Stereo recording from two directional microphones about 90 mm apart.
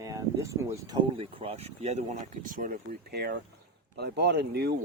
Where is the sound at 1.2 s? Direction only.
90° right.